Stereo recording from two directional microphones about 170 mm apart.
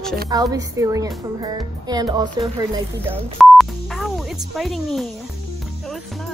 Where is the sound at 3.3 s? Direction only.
Centre (ahead or behind).